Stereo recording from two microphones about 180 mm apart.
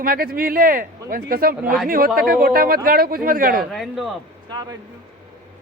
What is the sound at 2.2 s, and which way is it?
Speech, 55° right (ahead or behind).